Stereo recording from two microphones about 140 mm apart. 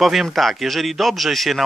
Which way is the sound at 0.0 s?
Centre (ahead or behind).